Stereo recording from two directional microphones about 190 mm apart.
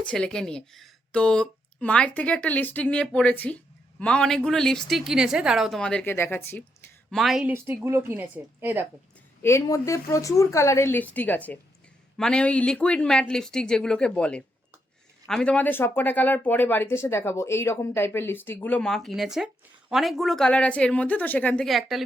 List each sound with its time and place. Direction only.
0.0 s speech: 5° left (ahead or behind)
7.1 s speech: centre (ahead or behind)
9.4 s speech: 15° left (ahead or behind)